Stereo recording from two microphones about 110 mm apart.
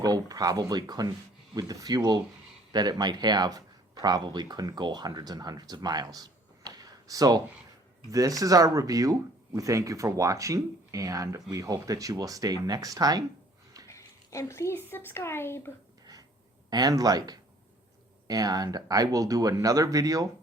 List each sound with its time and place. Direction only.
0.0 s speech: 35° right (ahead or behind)
6.7 s a sound: 35° right (ahead or behind)
8.1 s speech: 30° right (ahead or behind)
13.8 s speech: 30° left (ahead or behind)
16.6 s speech: 35° right (ahead or behind)